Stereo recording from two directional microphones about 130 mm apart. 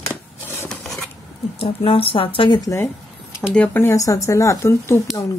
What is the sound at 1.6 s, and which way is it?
Speech, 45° left (ahead or behind).